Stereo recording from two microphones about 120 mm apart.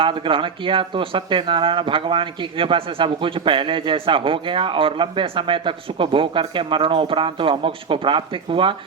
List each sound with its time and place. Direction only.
0.0 s speech: 45° right (ahead or behind)